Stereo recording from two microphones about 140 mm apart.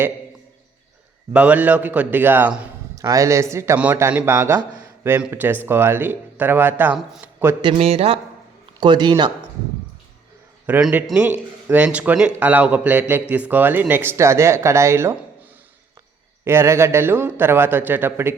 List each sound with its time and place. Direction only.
1.3 s speech: 10° right (ahead or behind)
3.0 s a man's voice: 25° right (ahead or behind)
7.6 s a man's voice: 45° right (ahead or behind)
8.8 s speech: 35° right (ahead or behind)
10.7 s a man's voice: 10° right (ahead or behind)
16.4 s speech: 20° right (ahead or behind)